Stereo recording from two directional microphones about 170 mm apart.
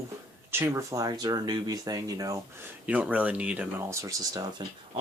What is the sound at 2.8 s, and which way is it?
Speech, 10° right (ahead or behind).